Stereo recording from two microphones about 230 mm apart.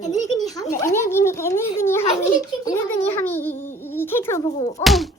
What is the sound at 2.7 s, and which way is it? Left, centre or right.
Speech, centre.